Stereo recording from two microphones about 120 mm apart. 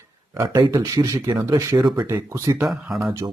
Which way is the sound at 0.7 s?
30° right (ahead or behind).